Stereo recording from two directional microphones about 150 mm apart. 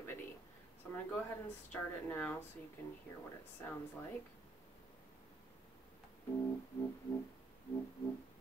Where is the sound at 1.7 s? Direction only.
10° left (ahead or behind).